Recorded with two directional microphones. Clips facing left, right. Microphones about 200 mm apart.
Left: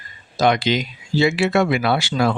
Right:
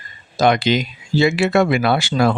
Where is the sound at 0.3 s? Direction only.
50° right (ahead or behind).